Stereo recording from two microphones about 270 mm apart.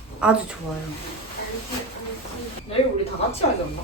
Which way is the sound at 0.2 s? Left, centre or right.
Centre.